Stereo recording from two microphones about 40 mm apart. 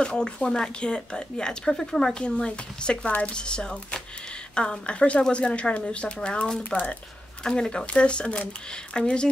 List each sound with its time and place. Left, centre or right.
0.0 s speech: left
7.4 s speech: left